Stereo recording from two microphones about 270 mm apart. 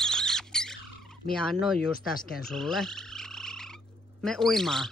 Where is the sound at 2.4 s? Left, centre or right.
Centre.